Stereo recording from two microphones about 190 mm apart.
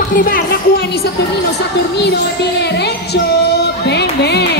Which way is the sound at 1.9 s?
60° left (ahead or behind).